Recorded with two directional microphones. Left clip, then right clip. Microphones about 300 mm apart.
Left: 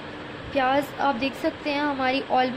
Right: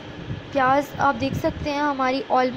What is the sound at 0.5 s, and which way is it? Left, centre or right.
Speech, centre.